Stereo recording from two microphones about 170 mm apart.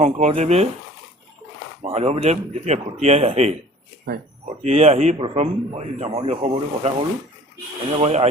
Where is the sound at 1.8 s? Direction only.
35° right (ahead or behind).